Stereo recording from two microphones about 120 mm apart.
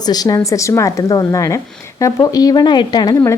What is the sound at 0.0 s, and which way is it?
A woman's voice, 35° left (ahead or behind).